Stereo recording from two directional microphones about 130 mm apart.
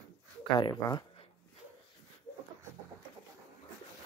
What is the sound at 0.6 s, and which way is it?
Speech, 30° left (ahead or behind).